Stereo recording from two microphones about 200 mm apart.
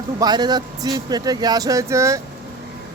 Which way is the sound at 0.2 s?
20° right (ahead or behind).